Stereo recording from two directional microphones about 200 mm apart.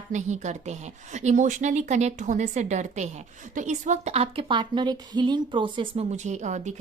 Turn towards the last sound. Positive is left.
turn(degrees=-35)  # may be behind; listen again after turning